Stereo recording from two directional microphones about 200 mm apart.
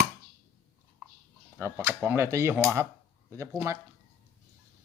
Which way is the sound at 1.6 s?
15° right (ahead or behind).